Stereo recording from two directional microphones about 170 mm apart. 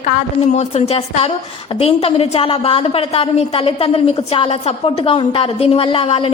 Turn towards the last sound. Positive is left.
turn(degrees=30)  # may be behind; listen again after turning